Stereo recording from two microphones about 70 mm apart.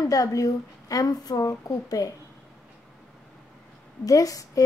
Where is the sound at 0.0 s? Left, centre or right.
Left.